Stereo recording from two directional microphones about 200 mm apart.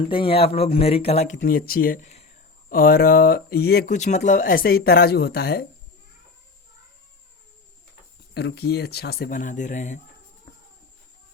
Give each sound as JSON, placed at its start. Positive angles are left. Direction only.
{"t": 0.1, "sound": "speech", "side_deg": 25}
{"t": 3.9, "sound": "speech", "side_deg": 35}
{"t": 8.3, "sound": "speech", "side_deg": 55}